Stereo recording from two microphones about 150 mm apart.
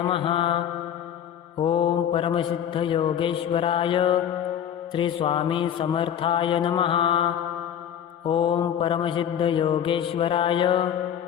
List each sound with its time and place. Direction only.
0.0 s mantra: 35° left (ahead or behind)
1.6 s mantra: 35° left (ahead or behind)